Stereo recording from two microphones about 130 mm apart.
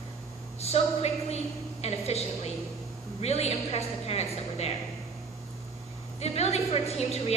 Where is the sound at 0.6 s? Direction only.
55° left (ahead or behind).